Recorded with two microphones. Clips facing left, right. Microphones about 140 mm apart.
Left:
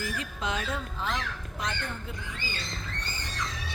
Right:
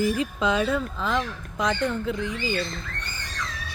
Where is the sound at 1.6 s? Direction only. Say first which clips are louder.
Right 11 dB; 90° right.